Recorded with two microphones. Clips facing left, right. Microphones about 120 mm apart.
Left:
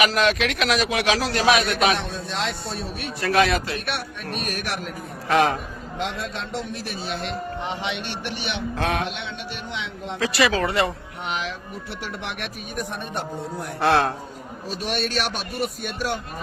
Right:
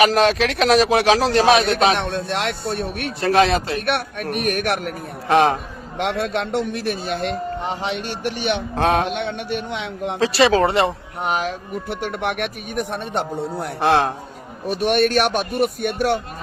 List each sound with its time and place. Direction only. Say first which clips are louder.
0.0 s speech: right 5 dB; 35° right (ahead or behind)
2.0 s speech: right 5 dB; 65° right (ahead or behind)
3.2 s a woman's voice: right 4 dB; 30° right (ahead or behind)
3.8 s speech: right 7 dB; 55° right (ahead or behind)
5.3 s a woman's voice: right 4 dB; 25° right (ahead or behind)
6.0 s a man's voice: right 8 dB; 65° right (ahead or behind); by 9.0 s 35° right (ahead or behind)
9.0 s speech: right 8 dB; 55° right (ahead or behind)
10.2 s a woman's voice: right 6 dB; 30° right (ahead or behind)
11.2 s speech: right 7 dB; 45° right (ahead or behind); by 13.7 s 65° right (ahead or behind)
13.7 s a woman's voice: right 2 dB; 20° right (ahead or behind)
14.7 s speech: right 9 dB; 60° right (ahead or behind)